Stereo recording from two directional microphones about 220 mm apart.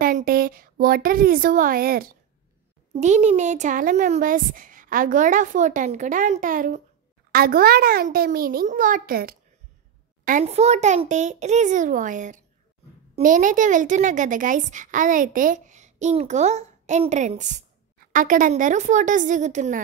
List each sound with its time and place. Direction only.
0.0 s a woman's voice: 40° right (ahead or behind)